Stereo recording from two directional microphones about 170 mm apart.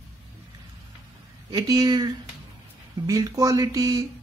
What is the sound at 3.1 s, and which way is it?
Speech, 20° right (ahead or behind).